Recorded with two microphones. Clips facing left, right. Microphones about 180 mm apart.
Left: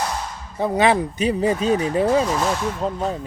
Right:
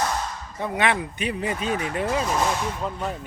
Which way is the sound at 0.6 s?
35° left (ahead or behind).